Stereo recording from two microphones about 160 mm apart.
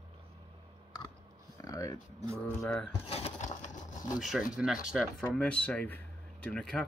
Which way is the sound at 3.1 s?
45° left (ahead or behind).